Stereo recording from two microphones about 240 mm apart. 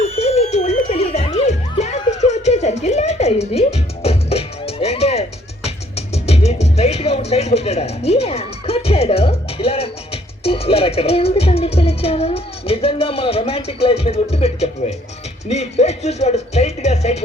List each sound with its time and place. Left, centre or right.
0.0 s music: left
6.2 s music: left